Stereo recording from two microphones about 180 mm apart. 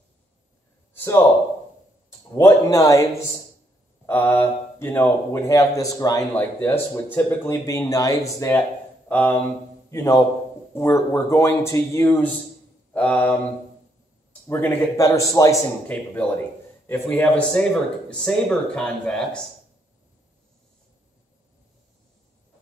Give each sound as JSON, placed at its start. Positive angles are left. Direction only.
{"t": 0.9, "sound": "a sound", "side_deg": 10}
{"t": 2.3, "sound": "a man's voice", "side_deg": 20}
{"t": 14.5, "sound": "speech", "side_deg": 15}